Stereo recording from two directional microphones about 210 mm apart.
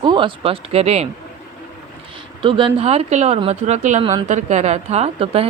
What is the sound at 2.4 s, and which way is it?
A woman's voice, 25° right (ahead or behind).